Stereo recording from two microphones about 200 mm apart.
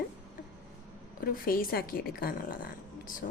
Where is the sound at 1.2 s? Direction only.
45° left (ahead or behind).